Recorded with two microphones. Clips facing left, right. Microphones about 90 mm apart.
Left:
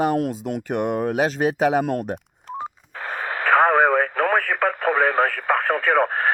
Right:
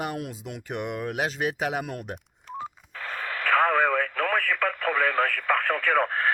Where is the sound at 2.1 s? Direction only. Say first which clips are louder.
Left 5 dB; 25° left (ahead or behind).